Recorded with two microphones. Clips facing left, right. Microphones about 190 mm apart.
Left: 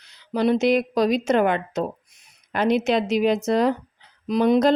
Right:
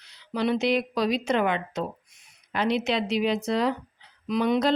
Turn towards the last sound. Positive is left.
turn(degrees=45)  # may be behind; listen again after turning